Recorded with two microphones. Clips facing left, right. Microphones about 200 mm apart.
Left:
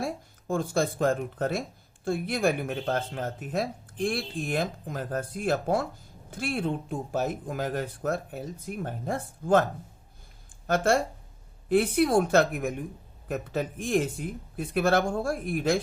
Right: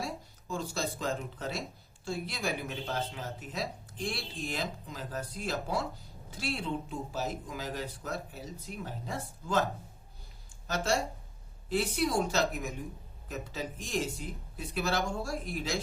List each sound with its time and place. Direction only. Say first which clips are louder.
0.0 s speech: left 6 dB; 55° left (ahead or behind)